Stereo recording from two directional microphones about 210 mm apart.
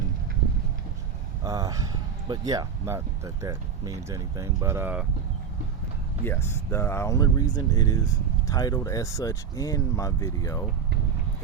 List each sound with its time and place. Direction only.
1.5 s speech: 15° right (ahead or behind)
6.2 s speech: 10° left (ahead or behind)